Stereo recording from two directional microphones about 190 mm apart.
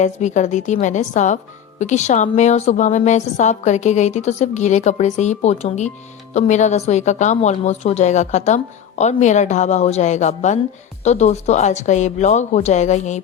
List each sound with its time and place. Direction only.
0.0 s a woman's voice: 40° left (ahead or behind)